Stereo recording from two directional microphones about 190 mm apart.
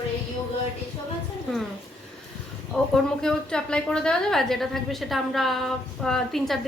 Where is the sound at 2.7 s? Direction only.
5° left (ahead or behind).